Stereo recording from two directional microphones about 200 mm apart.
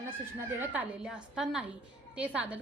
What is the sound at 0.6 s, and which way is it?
A woman's voice, 5° right (ahead or behind).